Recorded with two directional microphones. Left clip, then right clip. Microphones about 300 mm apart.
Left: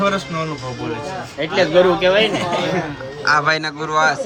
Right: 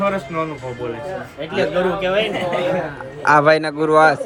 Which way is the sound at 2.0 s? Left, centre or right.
Left.